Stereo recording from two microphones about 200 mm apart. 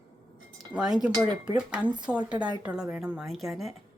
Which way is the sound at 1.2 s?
20° right (ahead or behind).